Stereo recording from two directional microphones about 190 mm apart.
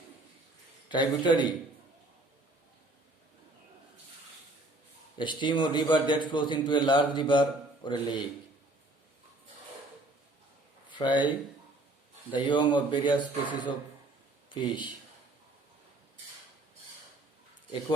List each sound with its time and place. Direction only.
0.9 s a man's voice: 25° left (ahead or behind)
5.1 s a man's voice: 25° left (ahead or behind)
10.8 s a sound: 25° left (ahead or behind)
12.3 s a man's voice: 25° left (ahead or behind)